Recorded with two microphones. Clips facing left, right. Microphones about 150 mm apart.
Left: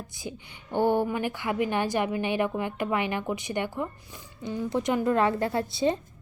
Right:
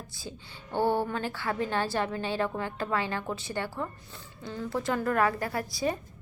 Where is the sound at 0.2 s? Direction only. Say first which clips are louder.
Left 4 dB; 15° left (ahead or behind).